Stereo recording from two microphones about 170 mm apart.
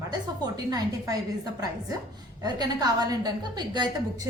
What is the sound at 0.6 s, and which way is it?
Speech, 20° right (ahead or behind).